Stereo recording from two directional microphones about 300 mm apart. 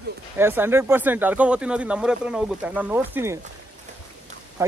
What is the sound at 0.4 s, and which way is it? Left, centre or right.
Speech, centre.